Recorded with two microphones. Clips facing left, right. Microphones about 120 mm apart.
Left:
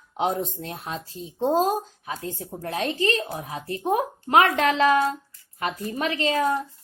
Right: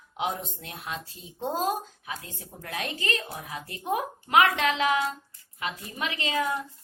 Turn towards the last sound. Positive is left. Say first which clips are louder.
# left 6 dB
turn(degrees=40)  # may be behind; listen again after turning